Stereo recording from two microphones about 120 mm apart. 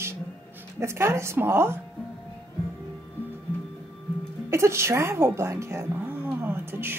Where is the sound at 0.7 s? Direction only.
20° right (ahead or behind).